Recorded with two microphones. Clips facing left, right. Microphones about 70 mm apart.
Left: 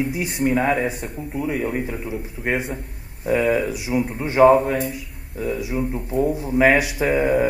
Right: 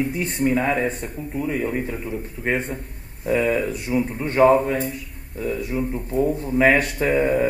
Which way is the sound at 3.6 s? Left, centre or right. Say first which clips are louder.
Even; left.